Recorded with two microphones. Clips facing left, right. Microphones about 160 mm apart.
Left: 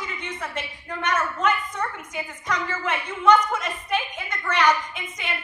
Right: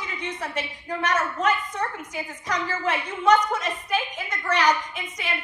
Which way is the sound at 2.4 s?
35° right (ahead or behind).